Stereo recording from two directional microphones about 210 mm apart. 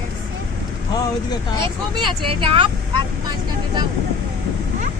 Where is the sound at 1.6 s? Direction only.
25° right (ahead or behind).